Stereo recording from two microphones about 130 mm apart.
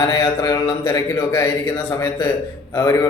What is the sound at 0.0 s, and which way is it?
A man's voice, 30° left (ahead or behind).